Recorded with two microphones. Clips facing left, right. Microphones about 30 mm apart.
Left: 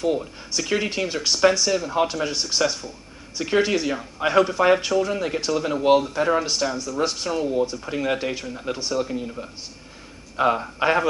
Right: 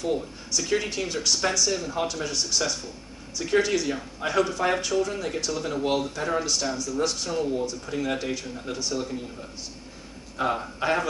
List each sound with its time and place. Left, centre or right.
0.5 s speech: left